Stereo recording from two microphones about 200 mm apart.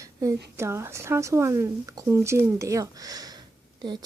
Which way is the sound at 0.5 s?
15° right (ahead or behind).